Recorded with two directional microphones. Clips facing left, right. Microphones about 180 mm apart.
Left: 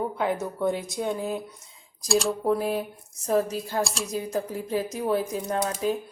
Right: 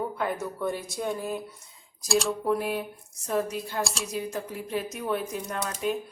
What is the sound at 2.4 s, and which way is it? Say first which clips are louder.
Speech: left 2 dB; 35° left (ahead or behind).